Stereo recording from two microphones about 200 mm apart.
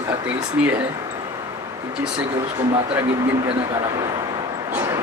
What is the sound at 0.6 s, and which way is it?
Speech, 5° right (ahead or behind).